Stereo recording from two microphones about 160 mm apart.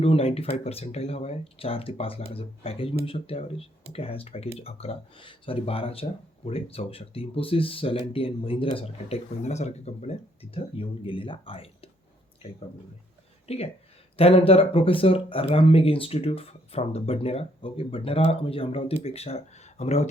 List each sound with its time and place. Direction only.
0.0 s speech: 35° left (ahead or behind)
13.5 s speech: 40° left (ahead or behind)